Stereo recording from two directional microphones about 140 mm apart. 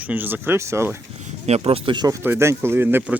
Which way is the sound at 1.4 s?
50° right (ahead or behind).